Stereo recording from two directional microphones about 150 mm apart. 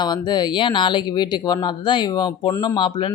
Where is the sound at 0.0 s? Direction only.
30° left (ahead or behind).